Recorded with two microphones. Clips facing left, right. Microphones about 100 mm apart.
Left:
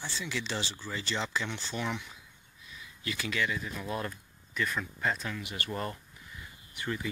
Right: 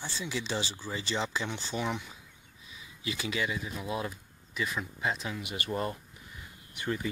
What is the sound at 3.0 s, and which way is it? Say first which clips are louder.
Speech: even; 20° right (ahead or behind).